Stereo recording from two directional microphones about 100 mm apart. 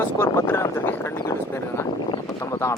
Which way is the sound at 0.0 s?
25° left (ahead or behind).